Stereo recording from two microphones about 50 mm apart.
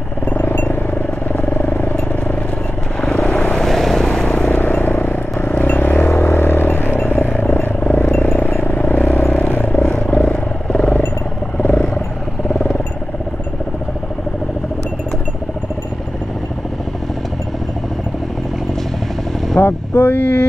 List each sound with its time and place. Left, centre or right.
0.3 s a sound: left
1.4 s vehicle: left
3.3 s vehicle: centre
3.6 s vehicle: centre
4.6 s vehicle: left
8.6 s vehicle: left
8.9 s vehicle: left
11.7 s wild animals: centre
19.6 s vehicle: left
20.0 s a sound: left